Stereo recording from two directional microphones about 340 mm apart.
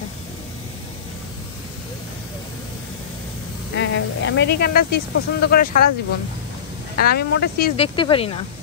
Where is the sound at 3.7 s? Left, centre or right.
Left.